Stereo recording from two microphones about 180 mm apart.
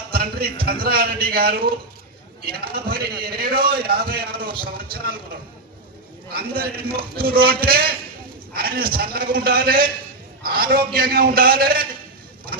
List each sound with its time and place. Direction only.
0.1 s a man's voice: 60° right (ahead or behind)
6.3 s a man's voice: 60° right (ahead or behind)